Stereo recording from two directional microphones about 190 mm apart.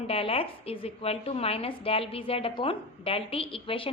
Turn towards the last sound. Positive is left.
turn(degrees=30)  # may be behind; listen again after turning